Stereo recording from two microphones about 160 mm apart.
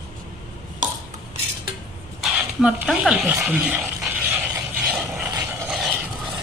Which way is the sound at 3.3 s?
10° right (ahead or behind).